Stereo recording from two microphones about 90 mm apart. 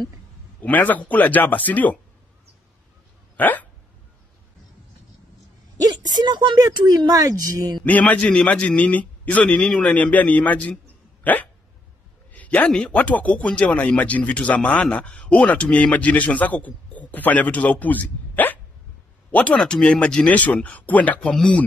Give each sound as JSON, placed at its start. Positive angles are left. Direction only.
{"t": 0.6, "sound": "a man's voice", "side_deg": 20}
{"t": 3.3, "sound": "dog", "side_deg": 20}
{"t": 5.8, "sound": "a woman's voice", "side_deg": -50}
{"t": 7.8, "sound": "a man's voice", "side_deg": 15}
{"t": 19.5, "sound": "a man's voice", "side_deg": 10}